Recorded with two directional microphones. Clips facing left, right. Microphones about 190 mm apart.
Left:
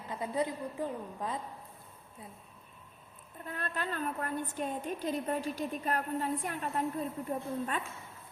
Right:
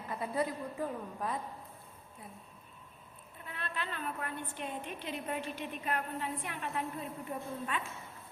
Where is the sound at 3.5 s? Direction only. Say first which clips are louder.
Left 4 dB; 45° left (ahead or behind).